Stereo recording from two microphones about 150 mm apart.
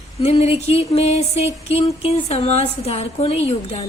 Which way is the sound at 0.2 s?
45° left (ahead or behind).